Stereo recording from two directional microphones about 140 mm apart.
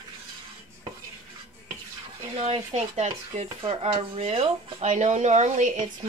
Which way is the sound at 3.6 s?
40° right (ahead or behind).